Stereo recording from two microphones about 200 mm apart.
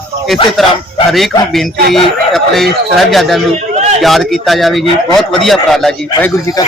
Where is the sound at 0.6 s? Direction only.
Centre (ahead or behind).